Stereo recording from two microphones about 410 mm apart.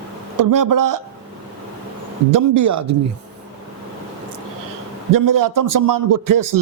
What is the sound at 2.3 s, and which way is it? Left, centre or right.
Speech, right.